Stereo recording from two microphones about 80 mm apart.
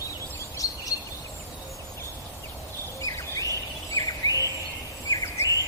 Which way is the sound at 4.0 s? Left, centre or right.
Left.